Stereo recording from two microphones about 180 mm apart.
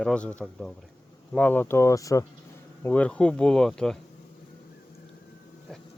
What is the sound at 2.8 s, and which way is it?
Speech, 10° left (ahead or behind).